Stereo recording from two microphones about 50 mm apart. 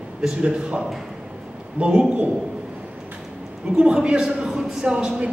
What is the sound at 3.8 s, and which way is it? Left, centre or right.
A woman's voice, centre.